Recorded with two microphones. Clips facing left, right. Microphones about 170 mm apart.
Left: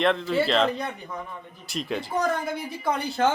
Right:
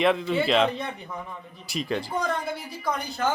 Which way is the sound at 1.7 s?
Centre (ahead or behind).